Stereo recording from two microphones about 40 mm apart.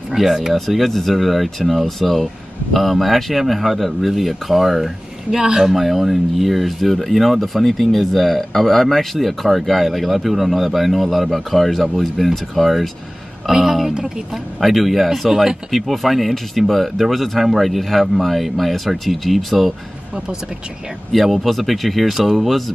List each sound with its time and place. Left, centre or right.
0.1 s speech: centre
13.5 s speech: centre
14.3 s speech: centre
21.1 s speech: centre